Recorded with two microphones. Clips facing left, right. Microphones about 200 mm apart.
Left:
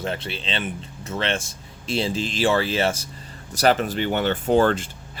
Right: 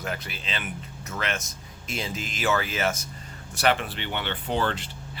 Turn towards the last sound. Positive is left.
turn(degrees=45)  # may be behind; listen again after turning